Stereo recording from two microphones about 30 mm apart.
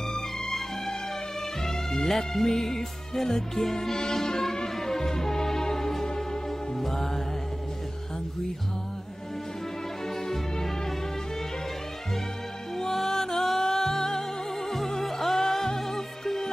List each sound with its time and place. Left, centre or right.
1.6 s music: centre
10.0 s music: centre
12.7 s music: centre